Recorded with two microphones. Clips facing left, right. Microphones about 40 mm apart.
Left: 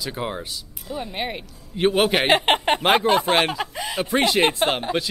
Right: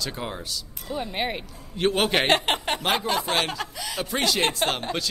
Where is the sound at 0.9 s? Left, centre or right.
Centre.